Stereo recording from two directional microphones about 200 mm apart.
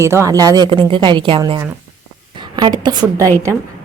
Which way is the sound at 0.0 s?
15° right (ahead or behind).